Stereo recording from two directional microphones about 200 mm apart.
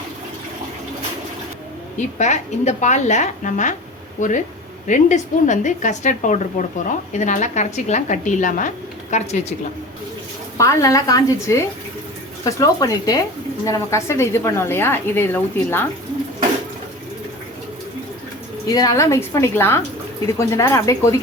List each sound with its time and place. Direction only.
2.0 s a woman's voice: 35° left (ahead or behind)
10.6 s a woman's voice: 15° left (ahead or behind)
18.7 s a woman's voice: 20° left (ahead or behind)